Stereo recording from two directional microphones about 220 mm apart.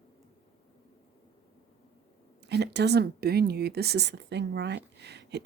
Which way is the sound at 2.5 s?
50° right (ahead or behind).